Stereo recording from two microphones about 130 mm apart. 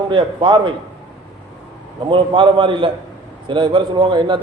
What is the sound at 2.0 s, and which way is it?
A man's voice, 40° right (ahead or behind).